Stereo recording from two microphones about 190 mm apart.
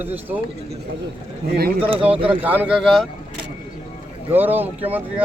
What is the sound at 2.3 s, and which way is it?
Speech, 10° right (ahead or behind).